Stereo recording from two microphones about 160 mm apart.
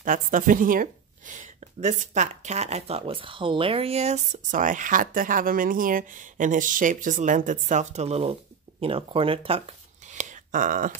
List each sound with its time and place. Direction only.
0.0 s speech: 55° right (ahead or behind)